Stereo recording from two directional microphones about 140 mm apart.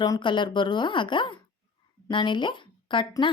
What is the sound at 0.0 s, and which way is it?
A woman's voice, 30° left (ahead or behind).